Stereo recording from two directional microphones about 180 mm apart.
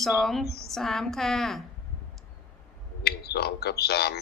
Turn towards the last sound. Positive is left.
turn(degrees=65)  # may be behind; listen again after turning